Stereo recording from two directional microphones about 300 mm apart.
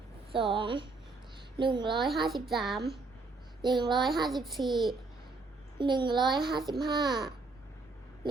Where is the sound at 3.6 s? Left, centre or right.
Centre.